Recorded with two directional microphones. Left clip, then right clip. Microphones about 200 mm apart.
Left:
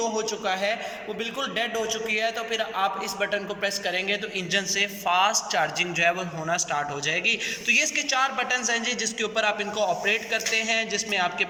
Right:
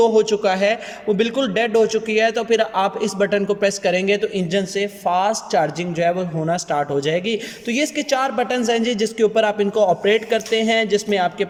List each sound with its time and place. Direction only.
0.0 s a man's voice: 55° right (ahead or behind)